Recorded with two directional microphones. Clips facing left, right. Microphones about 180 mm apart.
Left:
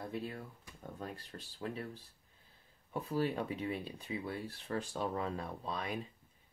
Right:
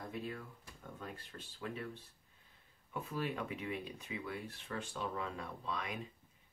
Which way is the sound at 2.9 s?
35° left (ahead or behind).